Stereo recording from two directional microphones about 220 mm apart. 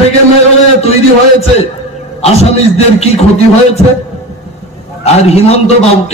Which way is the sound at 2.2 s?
30° left (ahead or behind).